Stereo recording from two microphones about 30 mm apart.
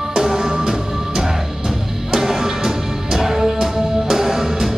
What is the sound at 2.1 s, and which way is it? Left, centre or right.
Music, centre.